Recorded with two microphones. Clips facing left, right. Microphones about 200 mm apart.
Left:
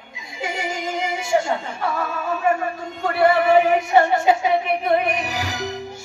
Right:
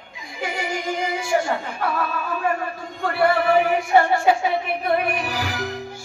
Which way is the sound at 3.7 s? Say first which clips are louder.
Left 1 dB; 20° left (ahead or behind).